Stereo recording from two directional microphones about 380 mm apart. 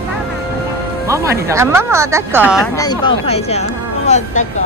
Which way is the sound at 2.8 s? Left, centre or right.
Centre.